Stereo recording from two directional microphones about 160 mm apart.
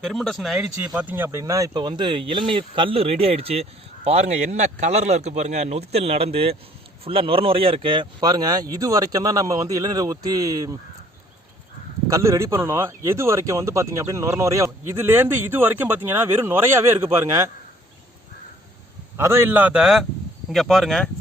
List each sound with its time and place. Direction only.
0.0 s speech: centre (ahead or behind); by 10.8 s 20° right (ahead or behind)
12.0 s speech: 20° right (ahead or behind)
19.1 s speech: 15° right (ahead or behind); by 21.1 s centre (ahead or behind)